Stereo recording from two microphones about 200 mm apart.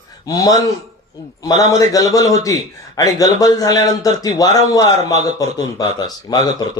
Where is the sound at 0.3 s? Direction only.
20° left (ahead or behind).